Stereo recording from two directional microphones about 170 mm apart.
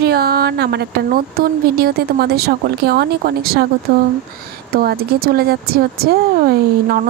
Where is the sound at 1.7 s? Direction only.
65° right (ahead or behind).